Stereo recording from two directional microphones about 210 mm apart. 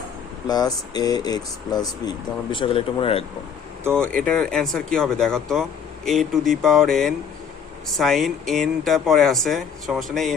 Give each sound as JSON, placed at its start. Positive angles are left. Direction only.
{"t": 0.4, "sound": "speech", "side_deg": 20}
{"t": 3.9, "sound": "speech", "side_deg": 5}